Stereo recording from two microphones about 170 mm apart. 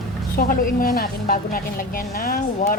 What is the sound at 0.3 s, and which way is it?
Speech, 55° left (ahead or behind).